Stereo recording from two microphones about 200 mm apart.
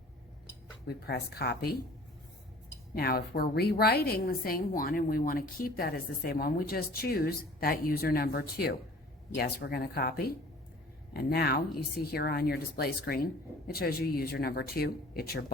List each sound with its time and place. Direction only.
0.9 s a woman's voice: 55° left (ahead or behind)
2.9 s a woman's voice: 50° left (ahead or behind)